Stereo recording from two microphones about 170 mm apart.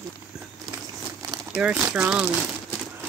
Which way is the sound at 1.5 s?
5° right (ahead or behind).